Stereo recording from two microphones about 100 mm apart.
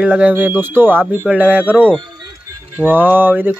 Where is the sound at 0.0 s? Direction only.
10° right (ahead or behind).